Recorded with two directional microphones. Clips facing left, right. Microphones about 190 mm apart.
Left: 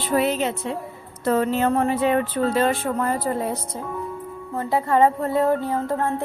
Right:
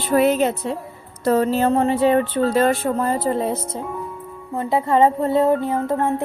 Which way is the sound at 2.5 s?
40° right (ahead or behind).